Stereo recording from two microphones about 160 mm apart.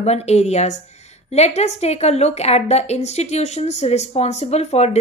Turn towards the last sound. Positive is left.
turn(degrees=40)  # may be behind; listen again after turning